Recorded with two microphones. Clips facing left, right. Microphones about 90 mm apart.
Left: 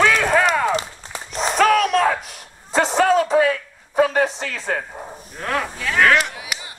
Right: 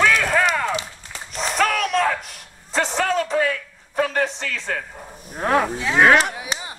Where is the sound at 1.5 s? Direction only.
Centre (ahead or behind).